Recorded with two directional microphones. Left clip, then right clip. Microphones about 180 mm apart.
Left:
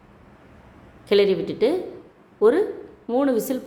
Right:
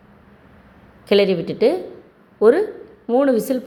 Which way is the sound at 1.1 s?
20° right (ahead or behind).